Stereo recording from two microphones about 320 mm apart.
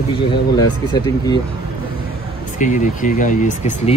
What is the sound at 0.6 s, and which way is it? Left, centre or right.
Speech, centre.